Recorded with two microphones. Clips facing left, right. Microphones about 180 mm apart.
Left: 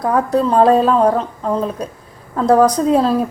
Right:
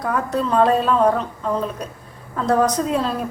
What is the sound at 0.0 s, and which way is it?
A woman's voice, 35° left (ahead or behind).